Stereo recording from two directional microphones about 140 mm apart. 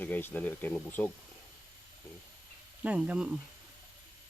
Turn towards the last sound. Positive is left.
turn(degrees=-10)  # may be behind; listen again after turning